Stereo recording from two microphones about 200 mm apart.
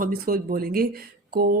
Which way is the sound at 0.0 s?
45° right (ahead or behind).